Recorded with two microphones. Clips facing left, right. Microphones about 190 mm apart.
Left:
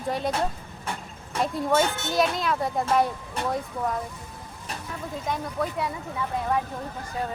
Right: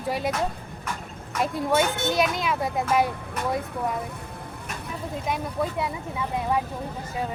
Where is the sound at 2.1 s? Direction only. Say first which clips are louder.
Even; centre (ahead or behind).